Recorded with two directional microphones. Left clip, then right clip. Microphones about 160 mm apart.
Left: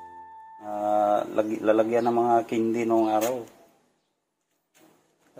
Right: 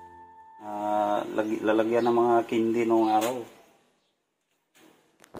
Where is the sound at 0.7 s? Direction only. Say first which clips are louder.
Left 3 dB; 45° left (ahead or behind).